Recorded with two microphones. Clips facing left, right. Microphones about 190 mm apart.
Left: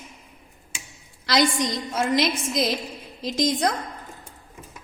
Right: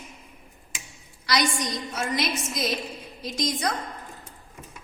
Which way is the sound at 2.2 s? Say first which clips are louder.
Left 5 dB; 90° left.